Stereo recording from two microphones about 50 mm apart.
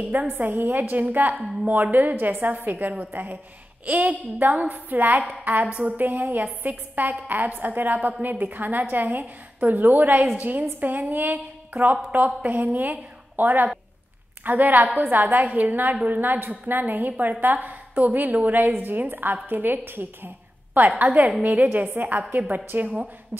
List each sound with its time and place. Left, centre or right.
0.1 s a woman's voice: right